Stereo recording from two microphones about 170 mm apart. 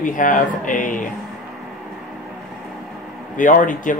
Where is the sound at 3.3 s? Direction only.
50° left (ahead or behind).